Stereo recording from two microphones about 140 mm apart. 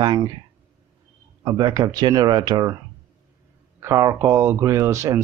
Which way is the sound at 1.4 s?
25° right (ahead or behind).